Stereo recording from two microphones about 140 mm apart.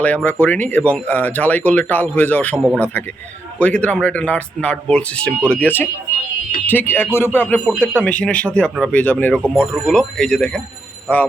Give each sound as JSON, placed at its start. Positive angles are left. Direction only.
{"t": 0.0, "sound": "speech", "side_deg": 10}